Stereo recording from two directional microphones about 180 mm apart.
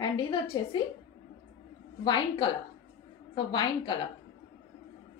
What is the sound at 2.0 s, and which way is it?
A woman's voice, 25° left (ahead or behind).